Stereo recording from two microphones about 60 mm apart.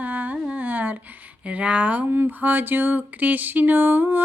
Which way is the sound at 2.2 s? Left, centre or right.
Right.